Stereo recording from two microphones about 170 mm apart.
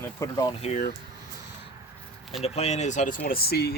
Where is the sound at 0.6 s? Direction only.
45° left (ahead or behind).